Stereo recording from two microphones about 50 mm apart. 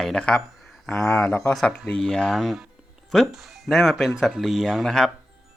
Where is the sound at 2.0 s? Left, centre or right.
Centre.